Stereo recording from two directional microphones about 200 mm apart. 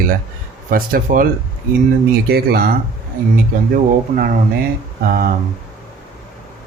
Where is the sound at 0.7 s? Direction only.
45° right (ahead or behind).